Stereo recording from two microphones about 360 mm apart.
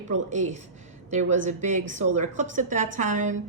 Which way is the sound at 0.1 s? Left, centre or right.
Centre.